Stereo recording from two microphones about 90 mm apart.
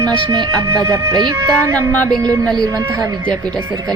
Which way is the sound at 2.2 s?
40° right (ahead or behind).